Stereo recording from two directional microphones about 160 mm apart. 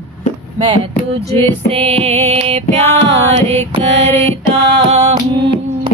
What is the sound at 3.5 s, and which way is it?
Mantra, 15° left (ahead or behind).